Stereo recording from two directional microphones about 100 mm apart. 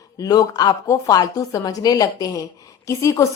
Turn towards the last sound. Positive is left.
turn(degrees=30)  # may be behind; listen again after turning